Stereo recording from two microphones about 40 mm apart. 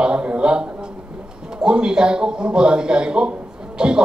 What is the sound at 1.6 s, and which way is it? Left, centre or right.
A man's voice, right.